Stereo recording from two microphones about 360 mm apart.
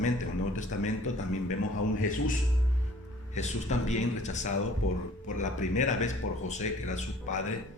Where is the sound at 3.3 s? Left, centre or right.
Centre.